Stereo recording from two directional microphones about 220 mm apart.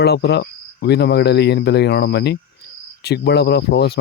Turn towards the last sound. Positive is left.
turn(degrees=45)  # may be behind; listen again after turning